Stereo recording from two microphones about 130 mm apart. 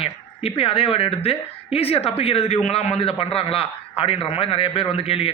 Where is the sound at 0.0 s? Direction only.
50° left (ahead or behind).